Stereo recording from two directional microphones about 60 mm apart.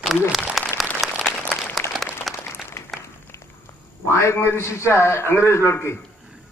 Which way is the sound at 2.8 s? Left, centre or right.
Left.